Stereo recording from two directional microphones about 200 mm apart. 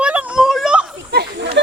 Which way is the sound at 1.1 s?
55° right (ahead or behind).